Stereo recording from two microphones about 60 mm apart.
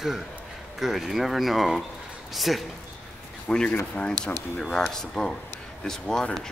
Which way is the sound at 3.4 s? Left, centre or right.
Centre.